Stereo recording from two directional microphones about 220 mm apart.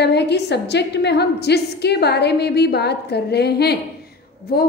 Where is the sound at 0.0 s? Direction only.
50° left (ahead or behind).